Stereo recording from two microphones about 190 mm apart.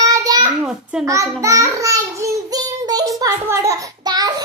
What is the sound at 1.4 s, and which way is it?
Child singing, 15° right (ahead or behind).